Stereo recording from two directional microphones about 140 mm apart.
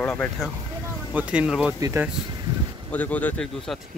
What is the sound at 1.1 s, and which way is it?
Speech, 10° right (ahead or behind).